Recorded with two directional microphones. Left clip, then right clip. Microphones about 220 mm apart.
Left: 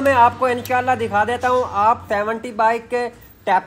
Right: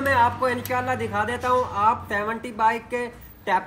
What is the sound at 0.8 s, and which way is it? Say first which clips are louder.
A woman's voice: left 7 dB; 30° left (ahead or behind).